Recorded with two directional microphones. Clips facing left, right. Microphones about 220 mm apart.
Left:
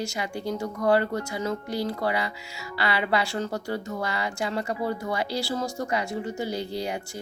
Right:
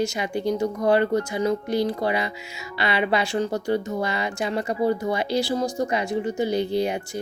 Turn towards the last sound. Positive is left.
turn(degrees=-20)  # may be behind; listen again after turning